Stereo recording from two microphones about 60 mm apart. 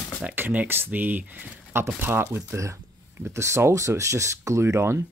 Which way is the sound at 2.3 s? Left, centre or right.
Right.